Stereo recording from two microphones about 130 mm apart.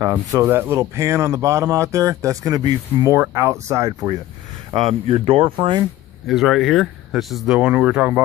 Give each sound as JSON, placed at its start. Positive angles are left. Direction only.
{"t": 0.1, "sound": "speech", "side_deg": -20}
{"t": 4.7, "sound": "speech", "side_deg": -50}
{"t": 6.2, "sound": "speech", "side_deg": 0}